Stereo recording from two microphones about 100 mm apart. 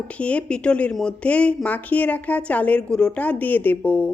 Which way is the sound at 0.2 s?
15° left (ahead or behind).